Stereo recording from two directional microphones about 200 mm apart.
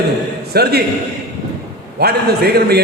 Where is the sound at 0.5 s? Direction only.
50° right (ahead or behind).